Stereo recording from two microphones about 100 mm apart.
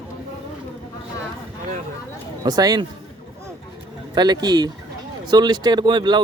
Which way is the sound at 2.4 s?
40° right (ahead or behind).